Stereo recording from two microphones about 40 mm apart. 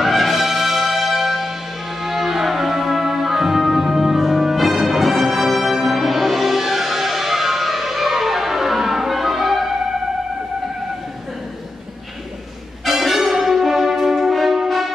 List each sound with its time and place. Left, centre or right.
0.0 s music: centre
12.8 s music: centre